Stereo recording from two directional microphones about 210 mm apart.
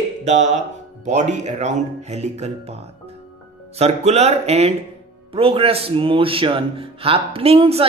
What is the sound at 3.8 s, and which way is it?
A man's voice, 30° right (ahead or behind).